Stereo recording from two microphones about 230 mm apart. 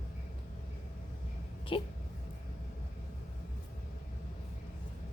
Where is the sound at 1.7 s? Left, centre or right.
Left.